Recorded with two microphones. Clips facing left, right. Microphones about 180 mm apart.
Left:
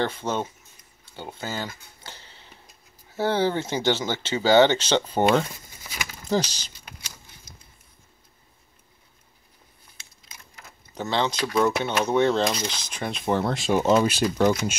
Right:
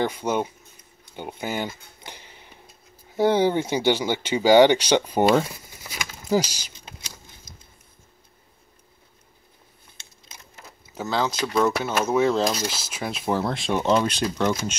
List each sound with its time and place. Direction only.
0.0 s speech: 10° right (ahead or behind)
1.0 s a sound: 15° right (ahead or behind)
3.2 s speech: 15° right (ahead or behind)
11.0 s speech: centre (ahead or behind)